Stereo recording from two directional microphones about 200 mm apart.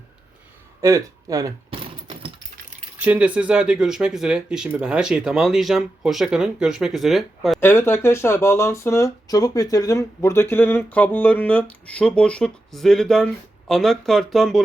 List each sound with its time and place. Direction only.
0.8 s a sound: 15° right (ahead or behind)
3.0 s speech: 5° right (ahead or behind)
7.6 s speech: 10° left (ahead or behind)